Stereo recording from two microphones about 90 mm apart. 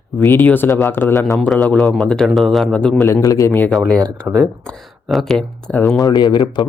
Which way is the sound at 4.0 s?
35° right (ahead or behind).